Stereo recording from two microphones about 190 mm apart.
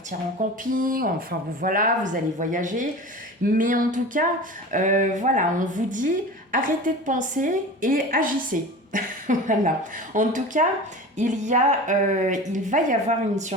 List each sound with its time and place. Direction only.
0.3 s a woman's voice: 45° right (ahead or behind)